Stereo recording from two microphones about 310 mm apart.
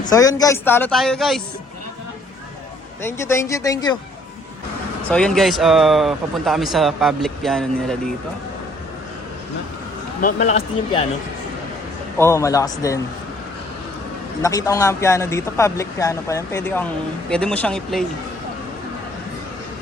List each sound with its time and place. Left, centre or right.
0.0 s speech: centre
3.0 s speech: centre
5.1 s a man's voice: centre
10.2 s speech: left
12.1 s speech: centre
14.4 s a man's voice: centre